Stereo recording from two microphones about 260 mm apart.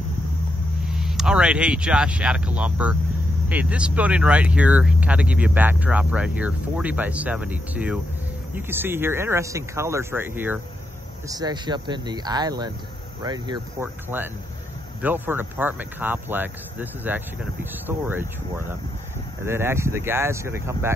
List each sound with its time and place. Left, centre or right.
0.8 s speech: centre